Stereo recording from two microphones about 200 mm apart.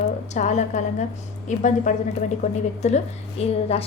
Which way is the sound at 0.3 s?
35° left (ahead or behind).